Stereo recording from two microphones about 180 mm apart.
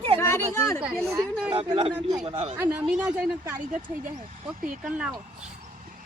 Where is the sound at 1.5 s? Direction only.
30° right (ahead or behind).